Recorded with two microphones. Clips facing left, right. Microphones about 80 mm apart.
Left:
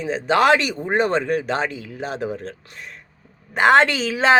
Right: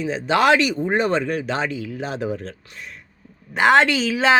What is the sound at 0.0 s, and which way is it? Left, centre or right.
Speech, left.